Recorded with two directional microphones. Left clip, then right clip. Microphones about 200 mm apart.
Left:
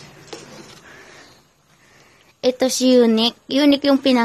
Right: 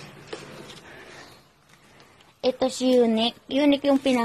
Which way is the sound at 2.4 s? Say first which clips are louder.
Left 6 dB; 45° left (ahead or behind).